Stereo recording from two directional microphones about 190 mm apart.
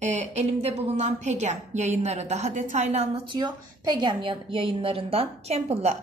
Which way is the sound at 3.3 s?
20° right (ahead or behind).